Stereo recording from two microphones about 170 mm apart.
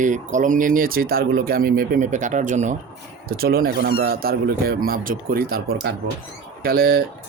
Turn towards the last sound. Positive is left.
turn(degrees=-65)  # may be behind; listen again after turning